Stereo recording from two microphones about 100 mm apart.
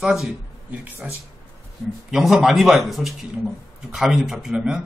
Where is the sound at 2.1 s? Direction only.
5° right (ahead or behind).